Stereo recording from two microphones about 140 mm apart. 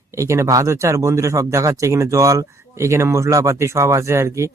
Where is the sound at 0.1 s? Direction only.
20° right (ahead or behind).